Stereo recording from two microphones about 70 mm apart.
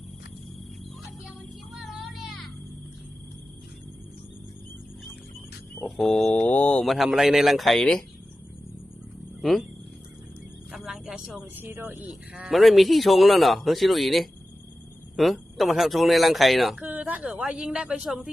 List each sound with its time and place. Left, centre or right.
1.7 s vehicle: centre
6.0 s a man's voice: centre
6.4 s speech: centre
6.8 s a man's voice: centre
9.4 s speech: centre
10.7 s music: centre
11.5 s speech: right
12.3 s a man's voice: centre
16.8 s a woman's voice: right; by 18.2 s centre